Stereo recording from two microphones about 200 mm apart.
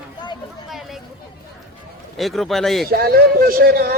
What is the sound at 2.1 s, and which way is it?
Speech, centre (ahead or behind).